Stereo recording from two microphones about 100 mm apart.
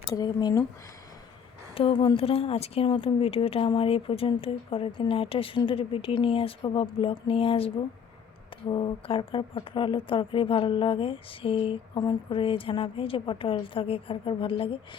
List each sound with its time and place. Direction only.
0.1 s speech: 40° left (ahead or behind)
1.7 s a woman's voice: 70° left (ahead or behind)
8.7 s speech: 55° left (ahead or behind)